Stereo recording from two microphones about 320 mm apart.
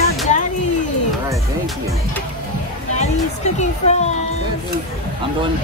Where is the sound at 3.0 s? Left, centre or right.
Left.